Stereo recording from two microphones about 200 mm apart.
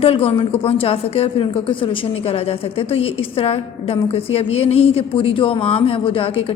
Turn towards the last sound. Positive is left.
turn(degrees=30)  # may be behind; listen again after turning